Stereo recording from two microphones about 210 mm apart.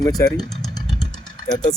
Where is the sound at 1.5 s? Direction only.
20° left (ahead or behind).